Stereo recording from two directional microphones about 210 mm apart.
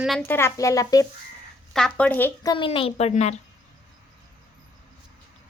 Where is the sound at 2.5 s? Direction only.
25° left (ahead or behind).